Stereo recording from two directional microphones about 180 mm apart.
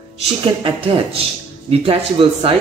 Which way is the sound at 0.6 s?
30° right (ahead or behind).